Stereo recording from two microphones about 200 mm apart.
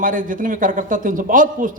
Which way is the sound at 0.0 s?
45° right (ahead or behind).